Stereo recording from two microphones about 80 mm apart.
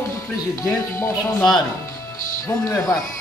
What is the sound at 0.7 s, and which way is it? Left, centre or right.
Music, left.